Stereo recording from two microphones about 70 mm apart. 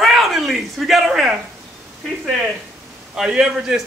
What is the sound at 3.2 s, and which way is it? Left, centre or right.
Speech, centre.